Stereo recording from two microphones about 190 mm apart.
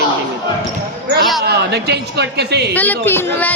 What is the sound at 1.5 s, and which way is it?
A man's voice, 60° right (ahead or behind).